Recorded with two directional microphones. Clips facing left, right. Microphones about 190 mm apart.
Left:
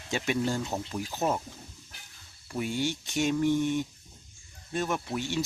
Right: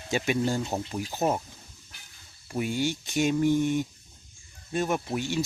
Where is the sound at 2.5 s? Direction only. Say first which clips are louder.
Right 2 dB; 10° right (ahead or behind).